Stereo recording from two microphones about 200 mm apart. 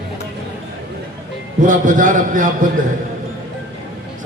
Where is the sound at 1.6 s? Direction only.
40° right (ahead or behind).